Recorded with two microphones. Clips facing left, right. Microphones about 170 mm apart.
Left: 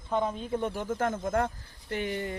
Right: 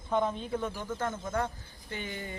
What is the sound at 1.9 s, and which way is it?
Speech, 75° left (ahead or behind).